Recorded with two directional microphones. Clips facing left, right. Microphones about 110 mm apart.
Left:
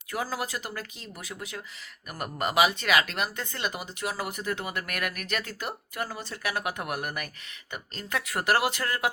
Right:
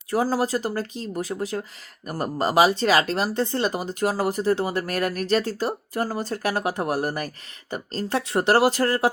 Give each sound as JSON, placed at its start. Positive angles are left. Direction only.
{"t": 0.1, "sound": "speech", "side_deg": -35}